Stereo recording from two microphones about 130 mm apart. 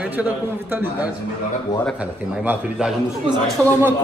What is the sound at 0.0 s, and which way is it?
Speech, 10° right (ahead or behind).